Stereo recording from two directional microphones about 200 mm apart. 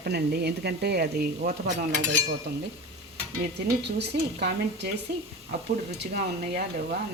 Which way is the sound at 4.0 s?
55° right (ahead or behind).